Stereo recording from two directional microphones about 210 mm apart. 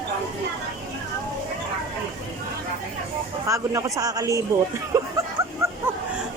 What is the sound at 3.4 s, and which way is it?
A man's voice, 15° right (ahead or behind).